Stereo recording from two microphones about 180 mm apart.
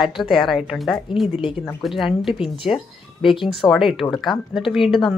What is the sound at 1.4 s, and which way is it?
Speech, 30° left (ahead or behind).